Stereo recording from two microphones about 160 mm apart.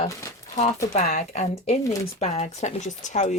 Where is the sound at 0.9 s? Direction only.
50° left (ahead or behind).